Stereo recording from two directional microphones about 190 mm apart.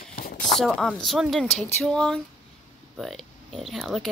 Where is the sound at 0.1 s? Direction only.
50° left (ahead or behind).